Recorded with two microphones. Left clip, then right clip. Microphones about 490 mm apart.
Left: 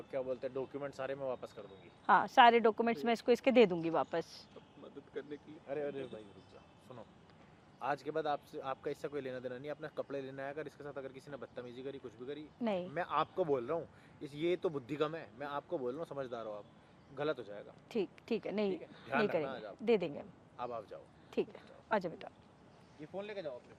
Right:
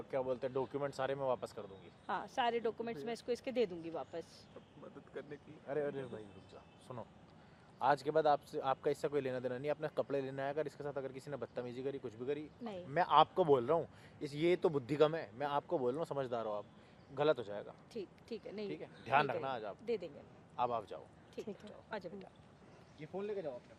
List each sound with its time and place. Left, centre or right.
0.1 s speech: right
2.0 s speech: left
5.1 s speech: right
17.8 s speech: left
18.7 s speech: right
19.8 s speech: left
20.6 s a man's voice: right
21.4 s speech: left
21.8 s speech: left